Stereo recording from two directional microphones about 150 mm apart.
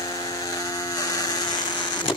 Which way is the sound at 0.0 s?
25° left (ahead or behind).